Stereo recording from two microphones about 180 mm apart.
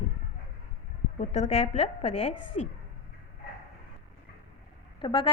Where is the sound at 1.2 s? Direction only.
40° left (ahead or behind).